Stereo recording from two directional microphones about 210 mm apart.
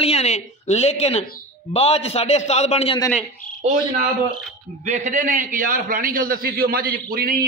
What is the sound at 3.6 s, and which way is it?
A man's voice, 35° right (ahead or behind).